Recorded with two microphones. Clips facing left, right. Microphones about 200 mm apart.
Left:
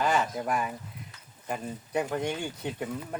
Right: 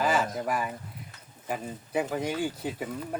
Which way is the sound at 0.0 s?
Centre (ahead or behind).